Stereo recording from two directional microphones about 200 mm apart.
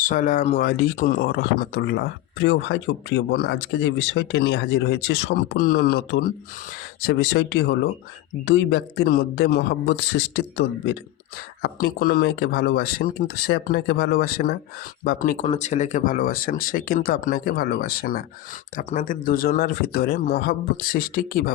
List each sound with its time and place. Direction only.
0.0 s speech: 40° left (ahead or behind)